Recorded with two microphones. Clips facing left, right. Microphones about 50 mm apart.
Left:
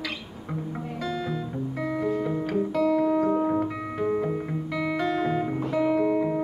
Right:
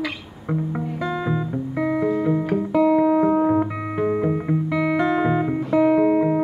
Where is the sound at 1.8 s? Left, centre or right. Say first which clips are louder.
Right 6 dB; right.